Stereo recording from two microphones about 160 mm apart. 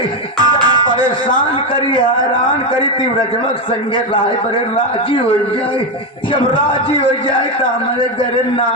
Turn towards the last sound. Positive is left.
turn(degrees=35)  # may be behind; listen again after turning